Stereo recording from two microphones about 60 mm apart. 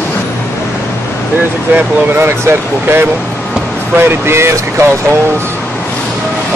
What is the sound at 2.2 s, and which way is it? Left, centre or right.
Speech, right.